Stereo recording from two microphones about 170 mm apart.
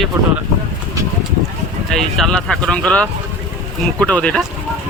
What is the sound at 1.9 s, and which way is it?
Speech, centre (ahead or behind).